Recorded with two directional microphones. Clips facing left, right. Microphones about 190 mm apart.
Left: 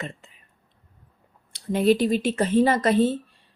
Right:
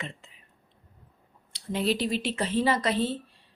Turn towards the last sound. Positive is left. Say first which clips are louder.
# left 6 dB
turn(degrees=50)  # may be behind; listen again after turning